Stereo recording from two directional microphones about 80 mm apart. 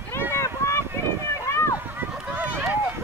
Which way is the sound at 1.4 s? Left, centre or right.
Left.